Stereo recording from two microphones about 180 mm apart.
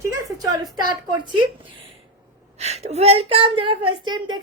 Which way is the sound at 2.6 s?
35° right (ahead or behind).